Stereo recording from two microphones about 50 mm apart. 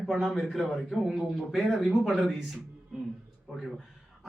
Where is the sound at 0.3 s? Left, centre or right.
Centre.